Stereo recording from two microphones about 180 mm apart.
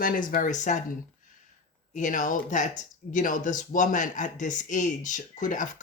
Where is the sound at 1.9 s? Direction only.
45° left (ahead or behind).